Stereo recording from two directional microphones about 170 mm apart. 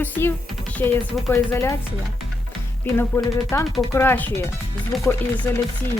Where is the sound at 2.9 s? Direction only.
15° left (ahead or behind).